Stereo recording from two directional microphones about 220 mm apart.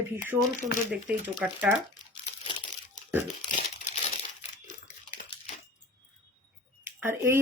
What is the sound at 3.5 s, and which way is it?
Crumpling, 35° left (ahead or behind).